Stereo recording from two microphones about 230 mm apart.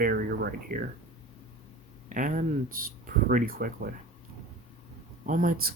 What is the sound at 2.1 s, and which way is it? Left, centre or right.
Speech, right.